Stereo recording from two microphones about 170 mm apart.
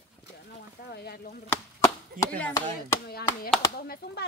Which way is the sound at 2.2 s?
50° right (ahead or behind).